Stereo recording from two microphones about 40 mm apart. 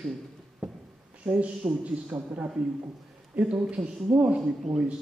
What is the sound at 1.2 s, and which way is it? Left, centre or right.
Speech, right.